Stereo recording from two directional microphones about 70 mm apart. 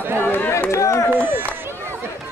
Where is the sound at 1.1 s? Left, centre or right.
Right.